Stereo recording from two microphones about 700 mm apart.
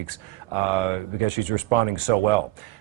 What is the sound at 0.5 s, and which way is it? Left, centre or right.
Speech, right.